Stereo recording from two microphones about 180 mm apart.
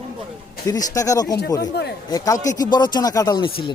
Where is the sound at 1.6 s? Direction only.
70° left (ahead or behind).